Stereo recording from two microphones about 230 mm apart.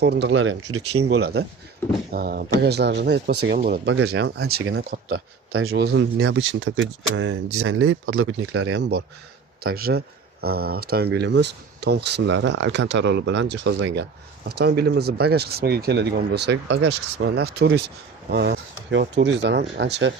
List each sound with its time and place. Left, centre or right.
0.0 s speech: right
1.0 s speech: right
1.8 s speech: centre
2.1 s speech: right
3.8 s speech: right
4.1 s speech: right
5.5 s speech: right
9.6 s speech: right